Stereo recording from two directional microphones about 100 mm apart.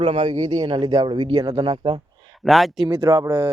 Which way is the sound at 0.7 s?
65° right (ahead or behind).